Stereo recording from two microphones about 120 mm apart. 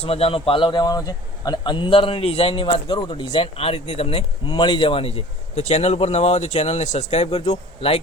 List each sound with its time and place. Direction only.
0.0 s a man's voice: 55° left (ahead or behind)
4.4 s speech: 40° left (ahead or behind); by 7.9 s 55° left (ahead or behind)